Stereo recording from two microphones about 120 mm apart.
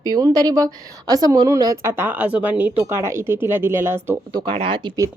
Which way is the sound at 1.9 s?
15° right (ahead or behind).